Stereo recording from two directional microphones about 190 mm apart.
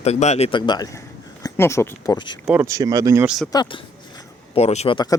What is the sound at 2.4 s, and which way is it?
Speech, 10° right (ahead or behind).